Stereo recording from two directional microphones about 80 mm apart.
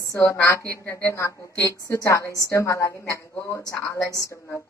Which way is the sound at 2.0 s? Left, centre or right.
Left.